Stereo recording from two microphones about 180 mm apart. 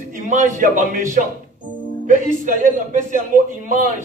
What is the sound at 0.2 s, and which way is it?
A man's voice, 45° right (ahead or behind).